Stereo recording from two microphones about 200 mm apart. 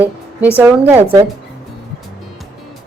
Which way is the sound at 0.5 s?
10° right (ahead or behind).